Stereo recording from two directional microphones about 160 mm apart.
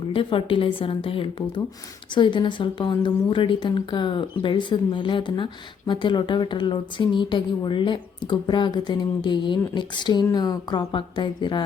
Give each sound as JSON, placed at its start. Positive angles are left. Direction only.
{"t": 0.1, "sound": "speech", "side_deg": 35}